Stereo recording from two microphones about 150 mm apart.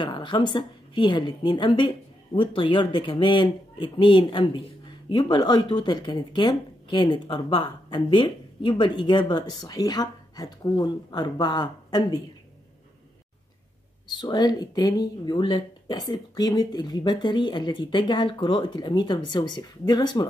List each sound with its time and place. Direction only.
0.0 s a woman's voice: 30° left (ahead or behind)
14.0 s speech: 30° left (ahead or behind)